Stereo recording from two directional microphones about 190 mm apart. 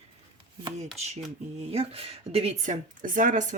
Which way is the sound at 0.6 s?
35° right (ahead or behind).